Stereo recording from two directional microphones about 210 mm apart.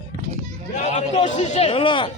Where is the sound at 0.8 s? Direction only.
30° left (ahead or behind).